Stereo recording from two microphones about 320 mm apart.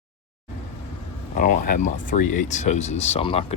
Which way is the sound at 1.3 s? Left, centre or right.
Left.